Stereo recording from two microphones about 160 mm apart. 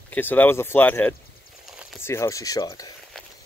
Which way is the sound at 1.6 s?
Centre (ahead or behind).